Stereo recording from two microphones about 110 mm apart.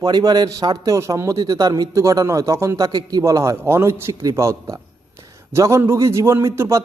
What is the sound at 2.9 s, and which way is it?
Speech, 40° right (ahead or behind).